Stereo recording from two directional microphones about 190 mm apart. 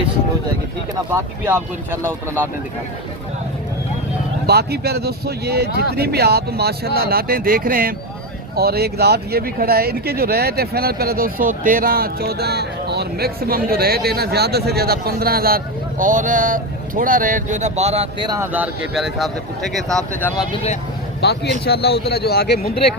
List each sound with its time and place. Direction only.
1.1 s speech: 15° right (ahead or behind)
4.4 s speech: 55° right (ahead or behind); by 18.1 s 35° right (ahead or behind)
18.3 s speech: 10° right (ahead or behind)
21.2 s a man's voice: 60° left (ahead or behind)